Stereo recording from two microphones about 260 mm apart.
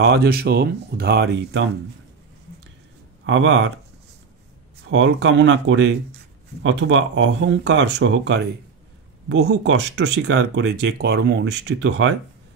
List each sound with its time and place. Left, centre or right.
0.0 s speech: right
3.3 s speech: right
4.9 s speech: right